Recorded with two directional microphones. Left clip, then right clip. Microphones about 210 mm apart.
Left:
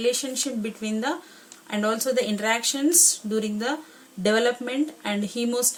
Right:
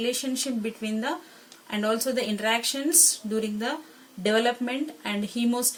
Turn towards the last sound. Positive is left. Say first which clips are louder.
# left 2 dB
turn(degrees=55)  # may be behind; listen again after turning